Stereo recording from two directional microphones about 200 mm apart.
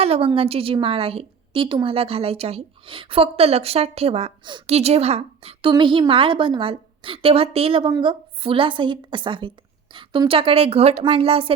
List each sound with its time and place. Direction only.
0.0 s a woman's voice: 30° right (ahead or behind)